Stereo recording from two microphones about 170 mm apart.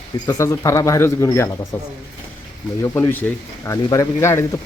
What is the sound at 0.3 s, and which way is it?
Speech, 20° left (ahead or behind).